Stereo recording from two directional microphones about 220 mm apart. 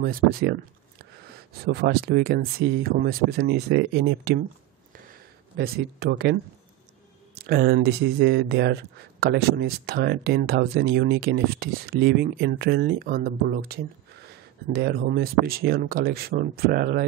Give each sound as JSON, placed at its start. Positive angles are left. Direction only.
{"t": 0.0, "sound": "speech", "side_deg": -40}
{"t": 4.9, "sound": "a sound", "side_deg": -40}
{"t": 7.4, "sound": "speech", "side_deg": -45}